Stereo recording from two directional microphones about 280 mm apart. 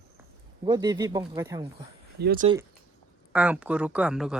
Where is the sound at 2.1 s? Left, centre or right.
Right.